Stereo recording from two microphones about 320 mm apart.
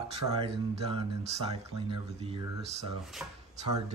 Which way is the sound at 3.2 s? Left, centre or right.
Centre.